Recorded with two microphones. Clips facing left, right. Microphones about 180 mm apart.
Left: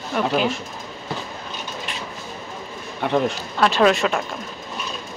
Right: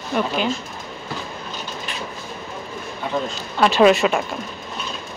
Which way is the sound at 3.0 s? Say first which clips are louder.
Left 4 dB; 70° left (ahead or behind).